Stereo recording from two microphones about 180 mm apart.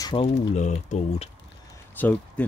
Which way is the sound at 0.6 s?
40° left (ahead or behind).